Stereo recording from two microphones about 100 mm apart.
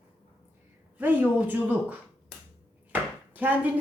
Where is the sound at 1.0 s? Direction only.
20° right (ahead or behind).